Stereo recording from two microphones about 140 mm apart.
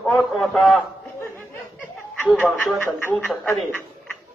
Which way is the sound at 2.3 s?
Centre (ahead or behind).